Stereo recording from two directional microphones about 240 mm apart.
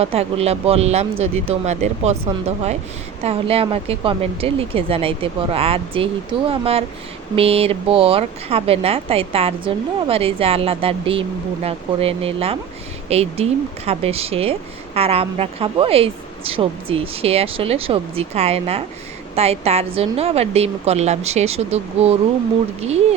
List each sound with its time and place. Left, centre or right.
0.0 s speech: right